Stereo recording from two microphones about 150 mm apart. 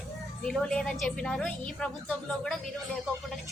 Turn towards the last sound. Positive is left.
turn(degrees=0)  # may be behind; listen again after turning